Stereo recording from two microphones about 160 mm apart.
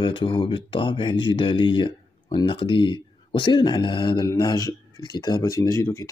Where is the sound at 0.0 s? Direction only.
30° left (ahead or behind).